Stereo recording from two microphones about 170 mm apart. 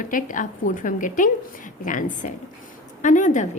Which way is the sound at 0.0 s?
50° left (ahead or behind).